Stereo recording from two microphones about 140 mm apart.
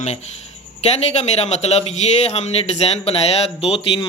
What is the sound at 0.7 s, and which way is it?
Speech, 50° left (ahead or behind).